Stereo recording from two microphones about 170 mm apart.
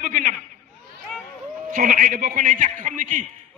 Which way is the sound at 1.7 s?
50° right (ahead or behind).